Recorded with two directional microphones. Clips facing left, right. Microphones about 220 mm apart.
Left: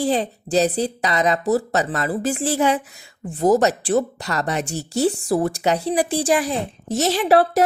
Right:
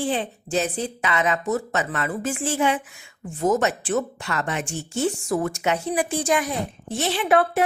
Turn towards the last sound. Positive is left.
turn(degrees=40)  # may be behind; listen again after turning